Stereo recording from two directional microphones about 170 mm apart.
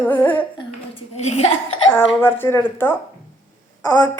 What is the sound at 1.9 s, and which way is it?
A woman's voice, 10° left (ahead or behind).